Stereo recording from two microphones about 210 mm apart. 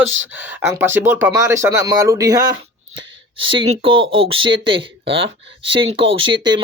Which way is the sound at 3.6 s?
25° right (ahead or behind).